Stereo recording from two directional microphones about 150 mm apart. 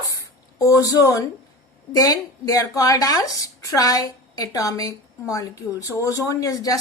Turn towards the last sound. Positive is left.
turn(degrees=25)  # may be behind; listen again after turning